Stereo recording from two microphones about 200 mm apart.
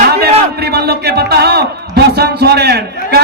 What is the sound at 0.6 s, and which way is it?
A man's voice, 55° right (ahead or behind).